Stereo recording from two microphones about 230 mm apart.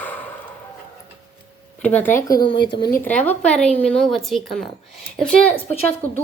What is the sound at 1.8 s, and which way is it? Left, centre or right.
Speech, centre.